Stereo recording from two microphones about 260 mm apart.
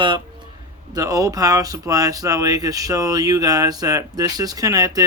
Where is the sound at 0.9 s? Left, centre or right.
Centre.